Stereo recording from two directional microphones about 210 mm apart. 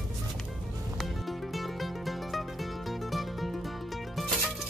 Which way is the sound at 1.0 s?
Centre (ahead or behind).